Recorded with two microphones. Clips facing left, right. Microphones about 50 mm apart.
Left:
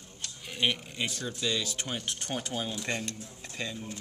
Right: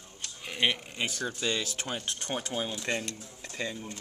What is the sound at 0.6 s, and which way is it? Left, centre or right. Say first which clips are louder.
Speech: right 1 dB; right.